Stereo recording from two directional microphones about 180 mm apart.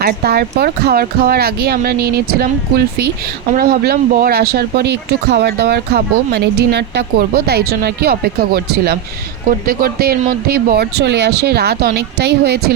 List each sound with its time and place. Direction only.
0.0 s speech: 60° right (ahead or behind)